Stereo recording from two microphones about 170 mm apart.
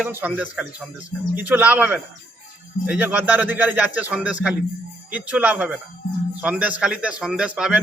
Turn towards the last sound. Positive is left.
turn(degrees=-5)  # may be behind; listen again after turning